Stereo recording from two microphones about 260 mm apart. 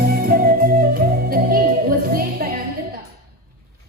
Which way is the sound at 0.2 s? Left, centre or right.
Right.